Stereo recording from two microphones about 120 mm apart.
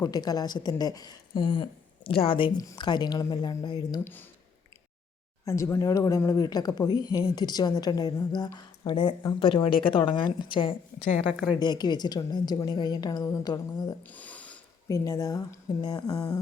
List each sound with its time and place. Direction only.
0.0 s speech: 35° left (ahead or behind)
2.0 s speech: 50° left (ahead or behind)
2.6 s speech: 35° left (ahead or behind)
4.0 s speech: 15° left (ahead or behind)
5.5 s speech: 25° left (ahead or behind)
14.1 s a sound: 10° left (ahead or behind)
14.8 s speech: 25° left (ahead or behind)